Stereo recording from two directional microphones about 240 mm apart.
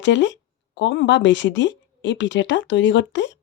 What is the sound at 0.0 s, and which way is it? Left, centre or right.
Speech, left.